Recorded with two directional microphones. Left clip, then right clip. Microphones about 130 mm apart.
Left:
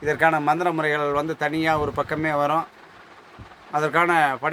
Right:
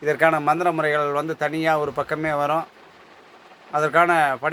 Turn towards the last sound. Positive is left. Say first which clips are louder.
# right 2 dB
turn(degrees=5)  # may be behind; listen again after turning